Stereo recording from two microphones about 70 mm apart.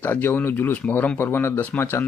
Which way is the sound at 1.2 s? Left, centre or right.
Left.